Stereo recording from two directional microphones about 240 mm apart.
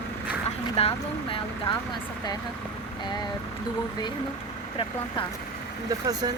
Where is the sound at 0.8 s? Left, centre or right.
Left.